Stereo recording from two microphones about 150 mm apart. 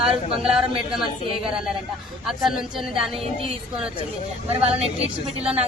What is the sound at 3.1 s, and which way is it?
A woman's voice, 40° right (ahead or behind).